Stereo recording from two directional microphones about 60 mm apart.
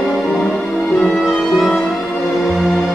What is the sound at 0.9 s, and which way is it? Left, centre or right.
Music, centre.